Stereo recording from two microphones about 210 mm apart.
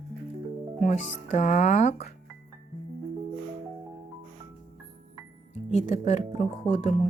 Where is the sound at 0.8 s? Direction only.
35° left (ahead or behind).